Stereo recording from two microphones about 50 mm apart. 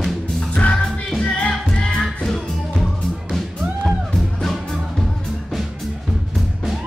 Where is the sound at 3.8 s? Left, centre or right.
Centre.